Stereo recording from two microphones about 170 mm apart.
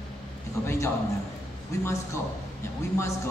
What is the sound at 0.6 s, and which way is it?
Speech, 15° left (ahead or behind).